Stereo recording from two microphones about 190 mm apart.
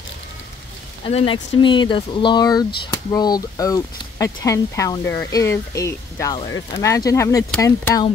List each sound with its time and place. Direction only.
1.0 s speech: 25° left (ahead or behind)